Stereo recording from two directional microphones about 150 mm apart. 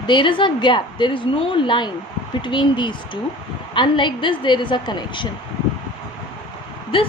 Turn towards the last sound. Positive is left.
turn(degrees=35)  # may be behind; listen again after turning